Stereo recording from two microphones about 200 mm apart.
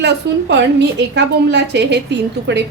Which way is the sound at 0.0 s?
60° right (ahead or behind).